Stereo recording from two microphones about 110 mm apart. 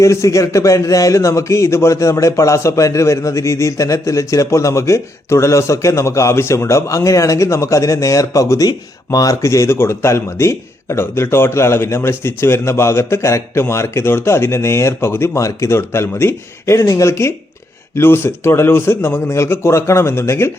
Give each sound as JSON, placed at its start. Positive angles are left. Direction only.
{"t": 0.0, "sound": "speech", "side_deg": 25}